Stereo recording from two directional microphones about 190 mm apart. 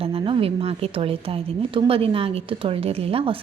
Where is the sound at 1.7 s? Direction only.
30° right (ahead or behind).